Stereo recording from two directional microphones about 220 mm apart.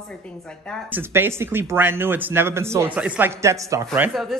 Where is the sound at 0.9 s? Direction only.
10° right (ahead or behind).